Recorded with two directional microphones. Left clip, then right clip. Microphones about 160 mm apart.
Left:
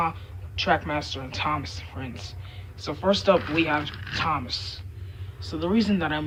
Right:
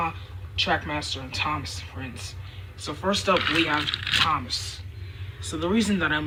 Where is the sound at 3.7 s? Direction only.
35° left (ahead or behind).